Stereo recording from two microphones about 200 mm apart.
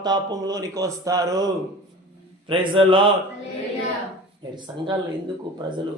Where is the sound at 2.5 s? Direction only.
25° right (ahead or behind).